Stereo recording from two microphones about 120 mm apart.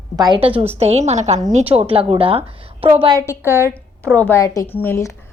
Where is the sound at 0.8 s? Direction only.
60° right (ahead or behind).